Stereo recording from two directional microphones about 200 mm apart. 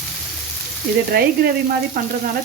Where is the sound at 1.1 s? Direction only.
50° right (ahead or behind).